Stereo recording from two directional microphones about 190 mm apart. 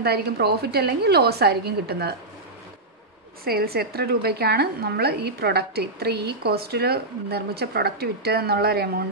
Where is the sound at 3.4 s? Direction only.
55° right (ahead or behind).